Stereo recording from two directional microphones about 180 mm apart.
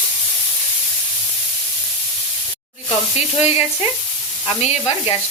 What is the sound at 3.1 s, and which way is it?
Frying, 35° left (ahead or behind).